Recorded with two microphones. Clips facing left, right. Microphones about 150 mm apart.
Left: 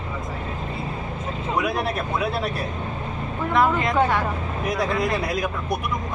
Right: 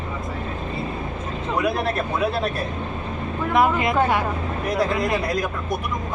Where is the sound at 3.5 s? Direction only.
15° right (ahead or behind).